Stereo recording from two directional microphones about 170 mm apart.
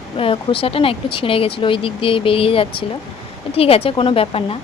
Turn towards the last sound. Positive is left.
turn(degrees=35)  # may be behind; listen again after turning